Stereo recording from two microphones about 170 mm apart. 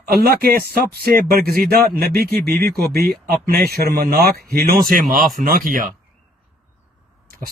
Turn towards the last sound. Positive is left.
turn(degrees=-55)  # may be behind; listen again after turning